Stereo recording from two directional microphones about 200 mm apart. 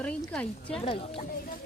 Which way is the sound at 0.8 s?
30° left (ahead or behind).